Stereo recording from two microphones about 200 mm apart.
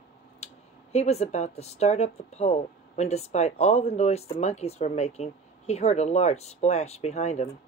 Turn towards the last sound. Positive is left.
turn(degrees=35)  # may be behind; listen again after turning